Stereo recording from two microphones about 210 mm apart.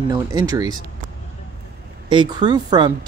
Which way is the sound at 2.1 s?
20° right (ahead or behind).